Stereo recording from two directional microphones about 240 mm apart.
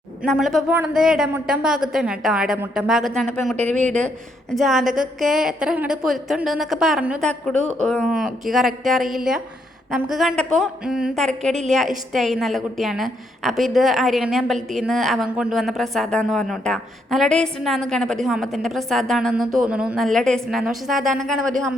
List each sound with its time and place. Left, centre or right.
0.2 s speech: centre
3.6 s speech: right
4.5 s speech: centre